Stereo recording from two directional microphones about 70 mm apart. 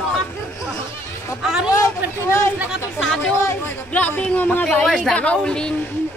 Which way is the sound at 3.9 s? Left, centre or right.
Left.